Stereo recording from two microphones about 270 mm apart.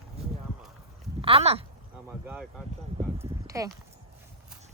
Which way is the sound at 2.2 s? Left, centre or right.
Centre.